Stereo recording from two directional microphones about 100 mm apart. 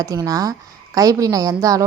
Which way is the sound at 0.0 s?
35° right (ahead or behind).